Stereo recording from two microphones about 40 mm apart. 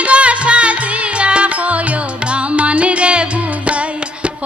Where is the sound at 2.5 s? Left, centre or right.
Right.